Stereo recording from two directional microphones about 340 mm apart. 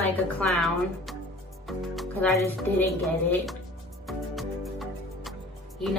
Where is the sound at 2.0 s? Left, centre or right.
Centre.